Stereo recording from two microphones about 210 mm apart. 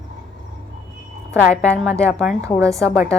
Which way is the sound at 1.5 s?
5° left (ahead or behind).